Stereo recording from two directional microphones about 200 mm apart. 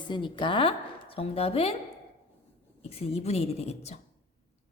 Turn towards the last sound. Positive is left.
turn(degrees=35)  # may be behind; listen again after turning